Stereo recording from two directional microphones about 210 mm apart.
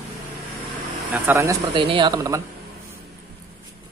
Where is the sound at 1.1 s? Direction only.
10° right (ahead or behind).